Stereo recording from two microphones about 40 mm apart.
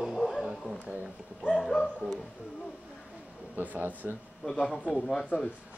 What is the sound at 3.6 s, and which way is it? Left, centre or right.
Speech, right.